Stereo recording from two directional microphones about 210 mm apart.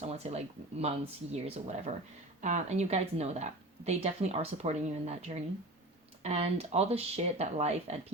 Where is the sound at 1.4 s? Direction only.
30° right (ahead or behind).